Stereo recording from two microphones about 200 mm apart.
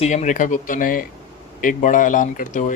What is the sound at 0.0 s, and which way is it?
Speech, 35° left (ahead or behind).